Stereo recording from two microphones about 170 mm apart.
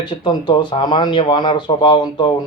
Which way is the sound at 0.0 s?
25° left (ahead or behind).